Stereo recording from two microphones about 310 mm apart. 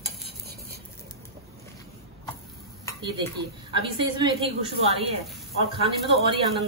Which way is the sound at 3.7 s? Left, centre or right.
Centre.